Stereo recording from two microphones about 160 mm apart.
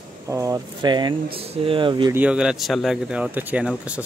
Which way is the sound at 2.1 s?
10° right (ahead or behind).